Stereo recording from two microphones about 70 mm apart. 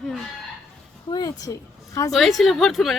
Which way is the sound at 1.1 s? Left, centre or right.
Left.